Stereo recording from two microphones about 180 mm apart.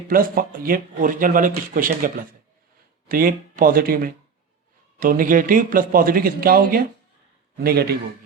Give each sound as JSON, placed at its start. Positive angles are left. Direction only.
{"t": 0.1, "sound": "a man's voice", "side_deg": -50}